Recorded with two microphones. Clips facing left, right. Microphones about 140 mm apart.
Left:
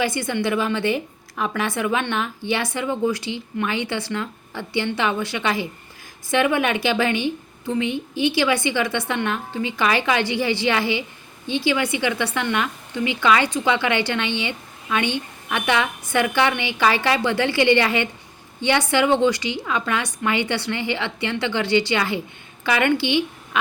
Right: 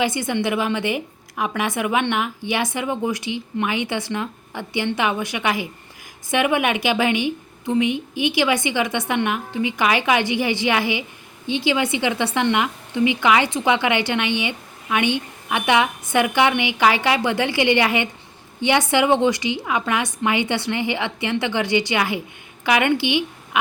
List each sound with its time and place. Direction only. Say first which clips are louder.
0.0 s a woman's voice: right 1 dB; 20° right (ahead or behind)